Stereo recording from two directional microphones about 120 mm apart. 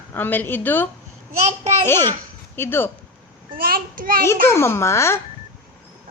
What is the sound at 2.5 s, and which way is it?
Speech, 20° left (ahead or behind).